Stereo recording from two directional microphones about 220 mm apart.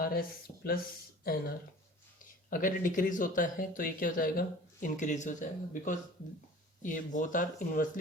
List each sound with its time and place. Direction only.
0.0 s speech: 45° left (ahead or behind)